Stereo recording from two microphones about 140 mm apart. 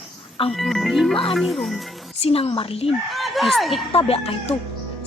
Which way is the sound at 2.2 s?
45° left (ahead or behind).